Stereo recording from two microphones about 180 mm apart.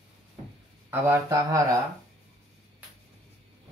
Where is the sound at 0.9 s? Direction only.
15° right (ahead or behind).